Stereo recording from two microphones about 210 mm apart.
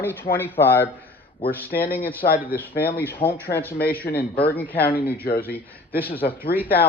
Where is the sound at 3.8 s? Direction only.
45° left (ahead or behind).